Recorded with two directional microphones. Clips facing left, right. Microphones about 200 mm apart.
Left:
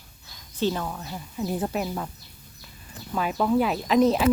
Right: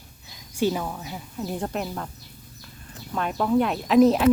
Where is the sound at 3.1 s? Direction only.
5° left (ahead or behind).